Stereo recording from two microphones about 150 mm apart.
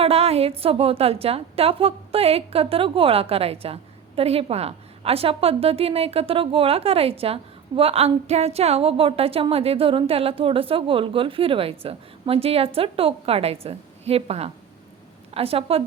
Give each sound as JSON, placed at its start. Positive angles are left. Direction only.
{"t": 0.0, "sound": "a woman's voice", "side_deg": -40}